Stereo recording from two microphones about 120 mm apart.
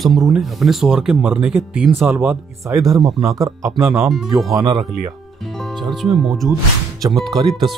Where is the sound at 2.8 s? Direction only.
30° right (ahead or behind).